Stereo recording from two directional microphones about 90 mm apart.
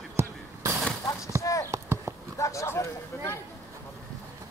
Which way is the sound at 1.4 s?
35° left (ahead or behind).